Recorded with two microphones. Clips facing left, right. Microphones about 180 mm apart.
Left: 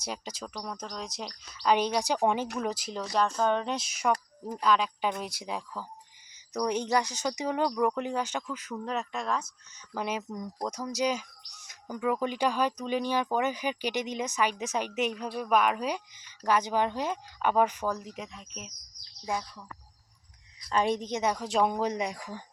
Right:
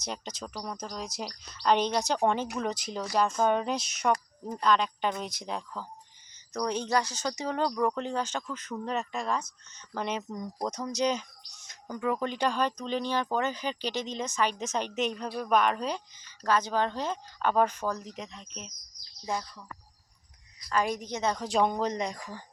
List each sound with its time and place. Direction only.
0.0 s speech: 5° left (ahead or behind)
8.7 s speech: centre (ahead or behind)
20.6 s a woman's voice: 30° left (ahead or behind)
21.3 s speech: 5° left (ahead or behind)